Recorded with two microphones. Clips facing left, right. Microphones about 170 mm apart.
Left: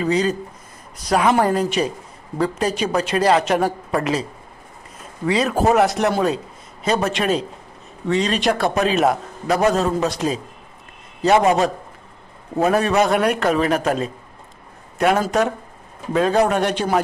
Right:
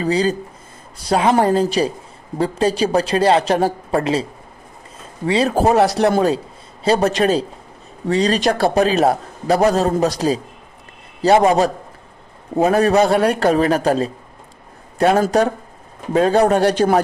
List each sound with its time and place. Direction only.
0.0 s a man's voice: 35° right (ahead or behind)
12.7 s a man's voice: 35° right (ahead or behind)